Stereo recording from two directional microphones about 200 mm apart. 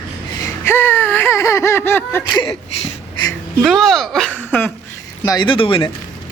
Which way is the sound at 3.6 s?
Centre (ahead or behind).